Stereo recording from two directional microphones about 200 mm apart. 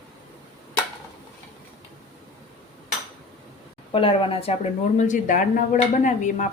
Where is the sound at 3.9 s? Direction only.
25° left (ahead or behind).